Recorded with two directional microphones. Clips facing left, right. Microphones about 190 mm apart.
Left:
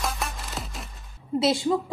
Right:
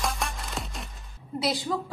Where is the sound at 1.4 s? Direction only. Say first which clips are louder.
Left 6 dB; 25° left (ahead or behind).